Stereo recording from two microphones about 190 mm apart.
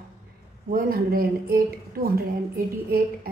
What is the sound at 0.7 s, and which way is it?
A woman's voice, 50° right (ahead or behind).